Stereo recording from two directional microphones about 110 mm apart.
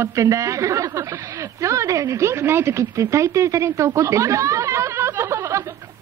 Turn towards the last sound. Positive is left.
turn(degrees=-25)  # may be behind; listen again after turning